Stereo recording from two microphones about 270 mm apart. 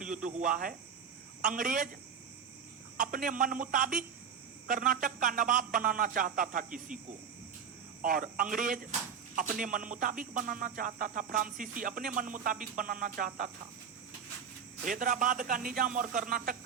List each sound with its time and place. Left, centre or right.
0.0 s speech: right
3.0 s speech: right
8.0 s speech: right
14.8 s speech: right